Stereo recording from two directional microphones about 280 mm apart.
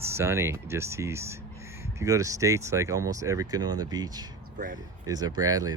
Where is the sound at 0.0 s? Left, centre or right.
Centre.